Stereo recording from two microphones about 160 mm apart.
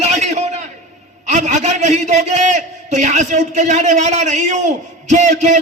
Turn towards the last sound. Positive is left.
turn(degrees=-45)  # may be behind; listen again after turning